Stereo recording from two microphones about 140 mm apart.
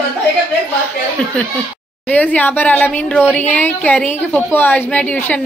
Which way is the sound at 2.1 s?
10° left (ahead or behind).